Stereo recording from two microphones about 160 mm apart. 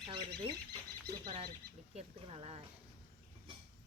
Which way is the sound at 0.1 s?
35° right (ahead or behind).